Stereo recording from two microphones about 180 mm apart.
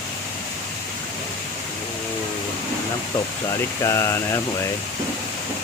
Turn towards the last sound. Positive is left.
turn(degrees=15)  # may be behind; listen again after turning